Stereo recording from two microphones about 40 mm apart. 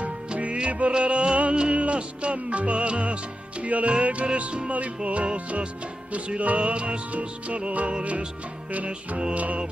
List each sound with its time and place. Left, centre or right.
0.0 s music: right